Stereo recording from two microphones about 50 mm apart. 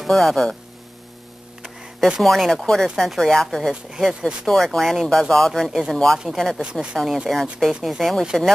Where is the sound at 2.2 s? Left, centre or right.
Centre.